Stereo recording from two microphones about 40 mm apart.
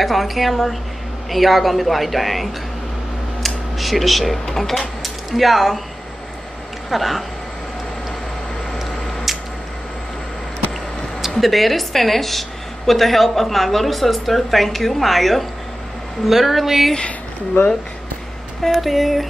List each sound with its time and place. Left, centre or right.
0.0 s a woman's voice: centre
3.4 s a sound: centre
4.5 s speech: centre
5.0 s a sound: centre
6.9 s a woman's voice: centre
11.3 s a woman's voice: centre
17.6 s speech: left
18.6 s a woman's voice: centre